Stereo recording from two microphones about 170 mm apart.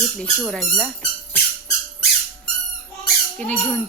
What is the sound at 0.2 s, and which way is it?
Speech, 5° left (ahead or behind).